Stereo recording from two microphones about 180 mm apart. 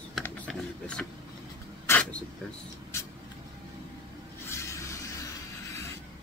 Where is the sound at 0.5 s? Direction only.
5° left (ahead or behind).